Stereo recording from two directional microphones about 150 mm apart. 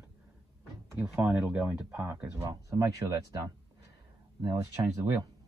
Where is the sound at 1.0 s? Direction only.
15° right (ahead or behind).